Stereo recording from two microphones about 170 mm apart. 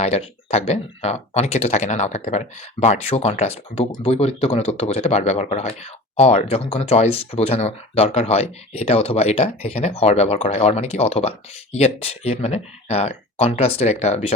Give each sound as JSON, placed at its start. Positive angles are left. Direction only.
{"t": 0.0, "sound": "speech", "side_deg": 40}